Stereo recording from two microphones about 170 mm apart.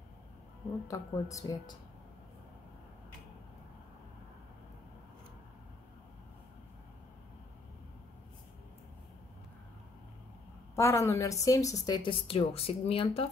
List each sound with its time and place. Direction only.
0.8 s a woman's voice: 20° left (ahead or behind)
10.8 s a woman's voice: 15° left (ahead or behind); by 13.3 s 35° left (ahead or behind)